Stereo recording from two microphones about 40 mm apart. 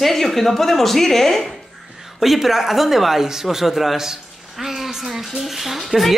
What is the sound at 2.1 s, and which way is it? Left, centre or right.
Speech, centre.